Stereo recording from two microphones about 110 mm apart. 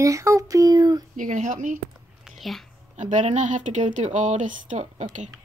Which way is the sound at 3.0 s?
90° right.